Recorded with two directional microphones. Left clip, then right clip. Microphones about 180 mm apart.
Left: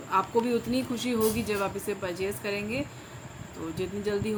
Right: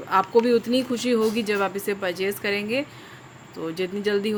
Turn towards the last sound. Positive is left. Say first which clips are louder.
# right 6 dB
turn(degrees=-50)  # may be behind; listen again after turning